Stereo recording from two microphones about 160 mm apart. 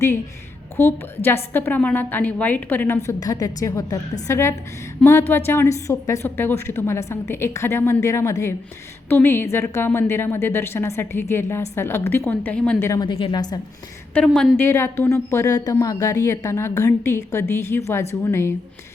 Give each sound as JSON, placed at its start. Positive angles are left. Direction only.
{"t": 0.8, "sound": "a woman's voice", "side_deg": 15}
{"t": 12.9, "sound": "a woman's voice", "side_deg": 25}
{"t": 14.1, "sound": "a woman's voice", "side_deg": 5}